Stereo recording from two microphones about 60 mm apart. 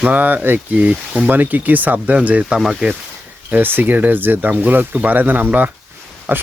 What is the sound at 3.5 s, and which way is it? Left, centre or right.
Speech, right.